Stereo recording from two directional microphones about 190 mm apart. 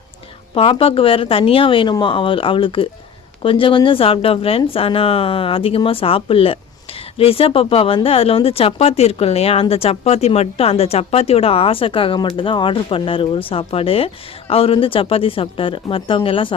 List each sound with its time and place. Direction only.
0.5 s speech: 30° left (ahead or behind)